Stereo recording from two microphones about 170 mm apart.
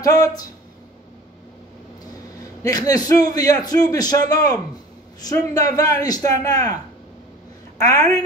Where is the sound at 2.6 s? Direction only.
20° left (ahead or behind).